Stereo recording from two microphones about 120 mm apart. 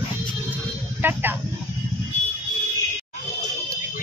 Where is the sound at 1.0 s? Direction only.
15° right (ahead or behind).